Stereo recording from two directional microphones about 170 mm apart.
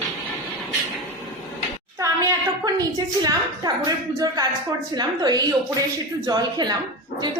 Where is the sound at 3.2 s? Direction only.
25° right (ahead or behind).